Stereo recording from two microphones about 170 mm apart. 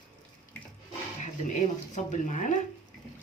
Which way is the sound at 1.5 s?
45° left (ahead or behind).